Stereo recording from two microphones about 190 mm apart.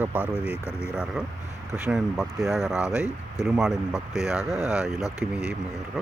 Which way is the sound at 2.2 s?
Centre (ahead or behind).